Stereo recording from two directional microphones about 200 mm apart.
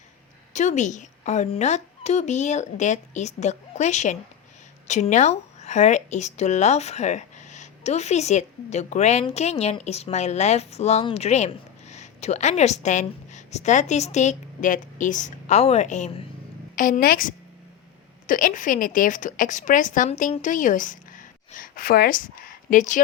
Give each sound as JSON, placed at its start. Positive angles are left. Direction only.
{"t": 0.5, "sound": "a woman's voice", "side_deg": 35}